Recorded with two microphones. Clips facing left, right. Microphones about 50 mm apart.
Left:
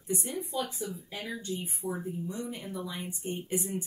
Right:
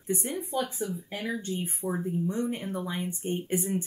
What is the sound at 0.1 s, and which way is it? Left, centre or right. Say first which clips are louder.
Speech: right 3 dB; right.